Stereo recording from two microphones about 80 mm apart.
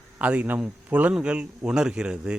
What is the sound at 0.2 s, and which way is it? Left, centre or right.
Speech, centre.